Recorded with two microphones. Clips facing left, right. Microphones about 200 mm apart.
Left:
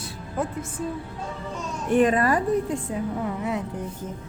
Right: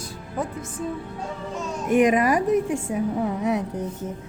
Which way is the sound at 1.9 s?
15° right (ahead or behind).